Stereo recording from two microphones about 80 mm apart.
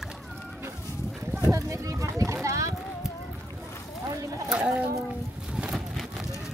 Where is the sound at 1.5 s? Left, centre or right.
Right.